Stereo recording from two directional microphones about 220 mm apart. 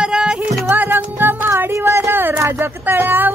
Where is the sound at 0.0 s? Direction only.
5° right (ahead or behind).